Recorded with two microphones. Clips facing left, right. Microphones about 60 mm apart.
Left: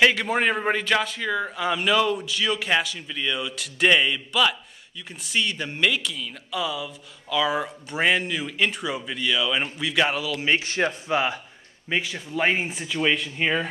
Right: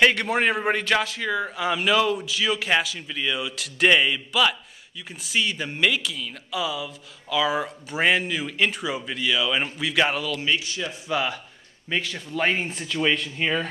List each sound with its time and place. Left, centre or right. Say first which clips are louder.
0.0 s speech: even; centre
10.4 s speech: left 2 dB; left
11.1 s speech: left 2 dB; left
11.9 s speech: left 1 dB; centre